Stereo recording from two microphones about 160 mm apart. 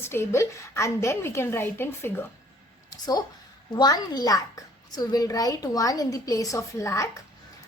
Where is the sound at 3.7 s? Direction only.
25° left (ahead or behind).